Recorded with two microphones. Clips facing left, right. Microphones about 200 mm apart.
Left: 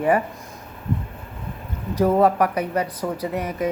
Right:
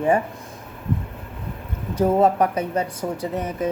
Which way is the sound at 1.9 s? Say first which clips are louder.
Even; 25° right (ahead or behind).